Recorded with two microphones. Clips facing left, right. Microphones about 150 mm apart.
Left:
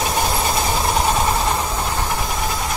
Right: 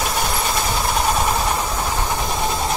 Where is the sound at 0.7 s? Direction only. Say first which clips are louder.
Even; 10° left (ahead or behind).